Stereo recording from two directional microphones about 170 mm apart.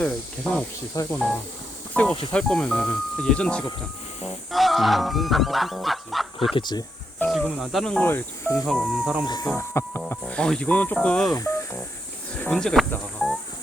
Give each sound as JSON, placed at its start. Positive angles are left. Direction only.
{"t": 0.0, "sound": "music", "side_deg": 5}
{"t": 1.9, "sound": "speech", "side_deg": 10}
{"t": 2.3, "sound": "music", "side_deg": 5}
{"t": 6.5, "sound": "speech", "side_deg": 25}
{"t": 7.2, "sound": "music", "side_deg": 0}
{"t": 8.5, "sound": "music", "side_deg": 0}
{"t": 9.2, "sound": "speech", "side_deg": 25}
{"t": 11.3, "sound": "music", "side_deg": 20}
{"t": 12.4, "sound": "speech", "side_deg": 5}